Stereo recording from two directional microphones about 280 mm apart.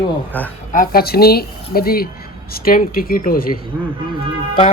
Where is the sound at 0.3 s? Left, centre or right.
Centre.